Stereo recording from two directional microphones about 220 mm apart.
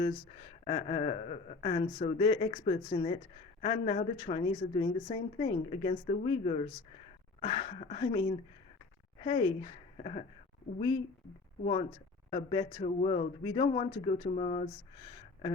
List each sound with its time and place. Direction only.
0.6 s a woman's voice: 25° left (ahead or behind)
9.2 s speech: 25° left (ahead or behind)
11.6 s a woman's voice: 25° left (ahead or behind)